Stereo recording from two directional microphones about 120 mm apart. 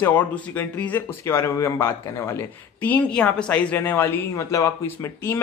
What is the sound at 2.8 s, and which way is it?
Speech, 10° left (ahead or behind).